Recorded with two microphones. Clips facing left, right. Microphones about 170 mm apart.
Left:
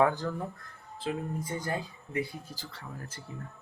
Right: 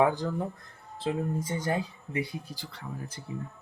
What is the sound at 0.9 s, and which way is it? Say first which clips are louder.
Speech: right 4 dB; 30° right (ahead or behind).